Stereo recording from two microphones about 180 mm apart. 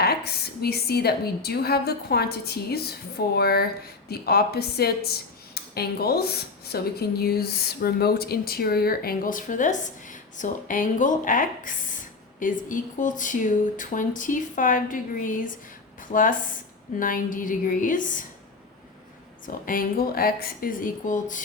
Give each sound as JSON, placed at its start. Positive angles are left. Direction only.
{"t": 0.0, "sound": "a woman's voice", "side_deg": 60}
{"t": 19.6, "sound": "speech", "side_deg": 50}